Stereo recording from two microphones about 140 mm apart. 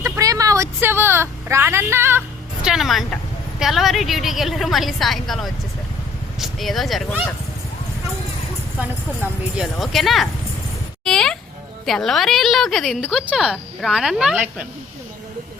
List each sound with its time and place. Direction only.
0.0 s a sound: 25° right (ahead or behind)
2.6 s a woman's voice: centre (ahead or behind)
9.6 s a woman's voice: centre (ahead or behind)